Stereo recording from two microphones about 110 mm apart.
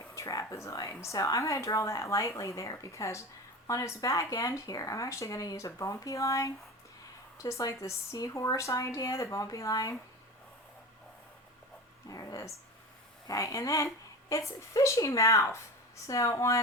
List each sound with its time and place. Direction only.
0.0 s speech: 30° left (ahead or behind)
12.0 s speech: 35° left (ahead or behind)